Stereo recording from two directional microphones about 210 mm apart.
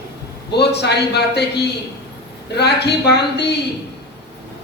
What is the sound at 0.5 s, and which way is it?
Speech, 55° left (ahead or behind).